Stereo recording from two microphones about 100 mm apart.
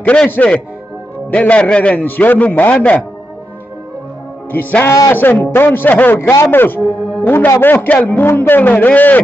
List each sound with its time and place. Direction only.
0.0 s a man's voice: 15° left (ahead or behind)
4.5 s a man's voice: 20° left (ahead or behind)
4.8 s a man's voice: 35° left (ahead or behind)
5.1 s a man's voice: 20° left (ahead or behind)